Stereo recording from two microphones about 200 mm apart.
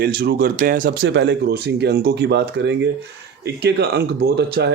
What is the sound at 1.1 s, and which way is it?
Speech, 60° right (ahead or behind).